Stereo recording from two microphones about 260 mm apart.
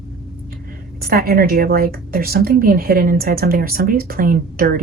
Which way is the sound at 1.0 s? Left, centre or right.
Right.